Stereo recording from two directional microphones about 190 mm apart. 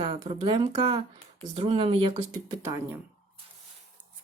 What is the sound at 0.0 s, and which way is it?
Speech, 30° right (ahead or behind).